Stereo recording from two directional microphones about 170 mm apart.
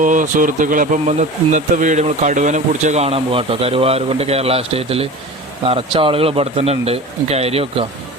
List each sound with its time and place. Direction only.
0.0 s speech: 50° right (ahead or behind); by 7.9 s 35° right (ahead or behind)